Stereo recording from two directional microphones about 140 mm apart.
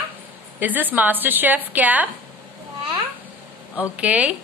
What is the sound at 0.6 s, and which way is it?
A woman's voice, 10° right (ahead or behind).